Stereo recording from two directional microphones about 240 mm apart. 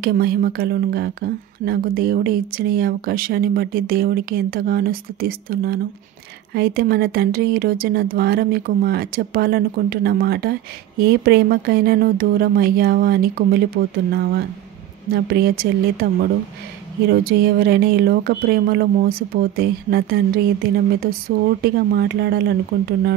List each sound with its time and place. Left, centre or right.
0.0 s speech: right
15.0 s speech: right
21.6 s speech: right